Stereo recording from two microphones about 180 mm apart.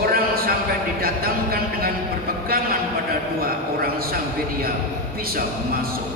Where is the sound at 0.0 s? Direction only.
55° right (ahead or behind).